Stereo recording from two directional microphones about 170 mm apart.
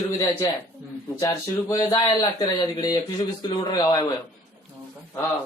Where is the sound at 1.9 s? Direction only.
30° left (ahead or behind).